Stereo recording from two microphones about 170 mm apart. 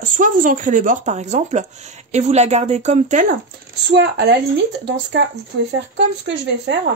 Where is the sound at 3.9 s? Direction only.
70° right (ahead or behind); by 5.2 s 90° right.